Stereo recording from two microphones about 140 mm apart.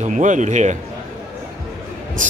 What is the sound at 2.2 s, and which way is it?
Train, 65° right (ahead or behind).